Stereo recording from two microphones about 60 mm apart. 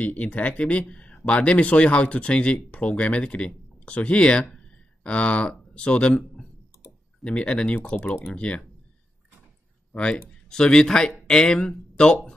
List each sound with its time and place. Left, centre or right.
0.0 s speech: left
9.9 s speech: centre